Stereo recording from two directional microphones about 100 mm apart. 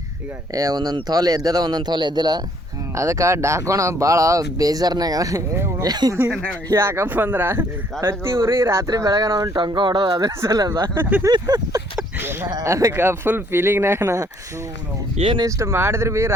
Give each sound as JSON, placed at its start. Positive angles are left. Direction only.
{"t": 0.5, "sound": "speech", "side_deg": -40}
{"t": 2.9, "sound": "speech", "side_deg": -30}
{"t": 6.3, "sound": "speech", "side_deg": 5}
{"t": 6.7, "sound": "speech", "side_deg": -25}
{"t": 9.6, "sound": "speech", "side_deg": -50}
{"t": 10.9, "sound": "speech", "side_deg": -20}
{"t": 11.3, "sound": "speech", "side_deg": -45}
{"t": 12.2, "sound": "speech", "side_deg": -20}
{"t": 15.4, "sound": "speech", "side_deg": -30}